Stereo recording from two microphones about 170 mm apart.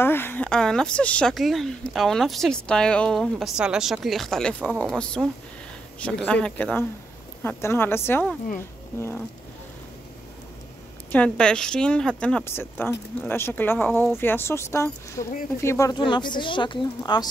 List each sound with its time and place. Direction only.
0.0 s speech: 15° left (ahead or behind)
11.1 s speech: 5° left (ahead or behind)
13.8 s speech: centre (ahead or behind)
14.1 s speech: 15° left (ahead or behind)